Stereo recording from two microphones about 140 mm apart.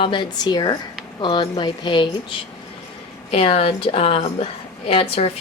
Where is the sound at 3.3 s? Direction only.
45° left (ahead or behind).